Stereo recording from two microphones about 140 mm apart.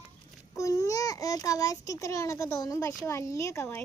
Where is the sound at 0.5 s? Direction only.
20° left (ahead or behind).